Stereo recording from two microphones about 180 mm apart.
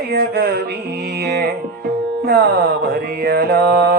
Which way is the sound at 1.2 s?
60° right (ahead or behind).